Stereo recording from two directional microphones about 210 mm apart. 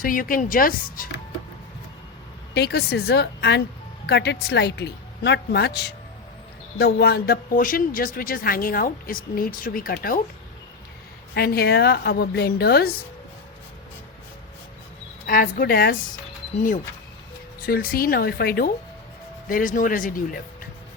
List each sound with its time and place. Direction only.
0.0 s speech: 40° left (ahead or behind)
2.6 s a woman's voice: 50° left (ahead or behind)
11.3 s a woman's voice: 50° left (ahead or behind)
15.3 s a woman's voice: 40° left (ahead or behind)